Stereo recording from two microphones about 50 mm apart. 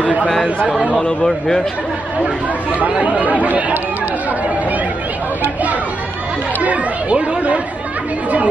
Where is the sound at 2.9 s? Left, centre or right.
Right.